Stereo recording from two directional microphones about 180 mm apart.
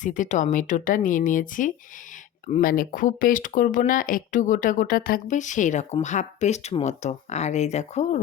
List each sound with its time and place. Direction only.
0.0 s speech: 45° left (ahead or behind)